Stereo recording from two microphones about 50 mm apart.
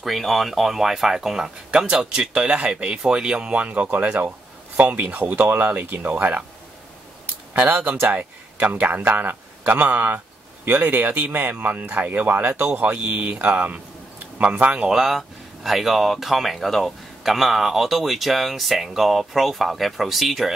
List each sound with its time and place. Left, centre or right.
0.0 s speech: centre; by 3.9 s right
3.9 s speech: right
7.5 s speech: right
14.8 s speech: centre